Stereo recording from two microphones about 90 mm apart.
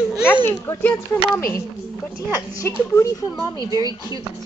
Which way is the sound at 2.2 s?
35° left (ahead or behind).